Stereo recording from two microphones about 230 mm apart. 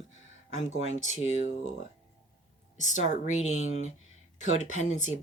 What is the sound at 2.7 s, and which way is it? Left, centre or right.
Speech, left.